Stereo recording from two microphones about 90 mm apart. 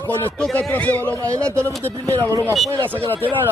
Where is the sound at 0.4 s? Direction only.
10° left (ahead or behind).